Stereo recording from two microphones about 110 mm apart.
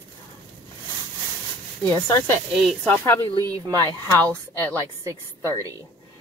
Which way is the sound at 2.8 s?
20° left (ahead or behind).